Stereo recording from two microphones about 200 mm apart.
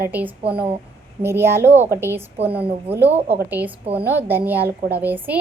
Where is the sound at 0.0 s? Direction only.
10° right (ahead or behind).